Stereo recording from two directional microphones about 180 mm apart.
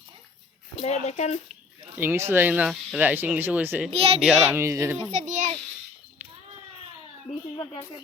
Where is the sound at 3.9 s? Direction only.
35° right (ahead or behind).